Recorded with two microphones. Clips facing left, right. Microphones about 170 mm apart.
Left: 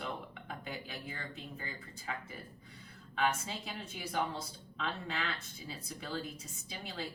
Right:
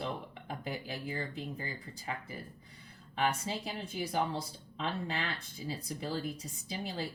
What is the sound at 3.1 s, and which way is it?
Speech, 35° right (ahead or behind).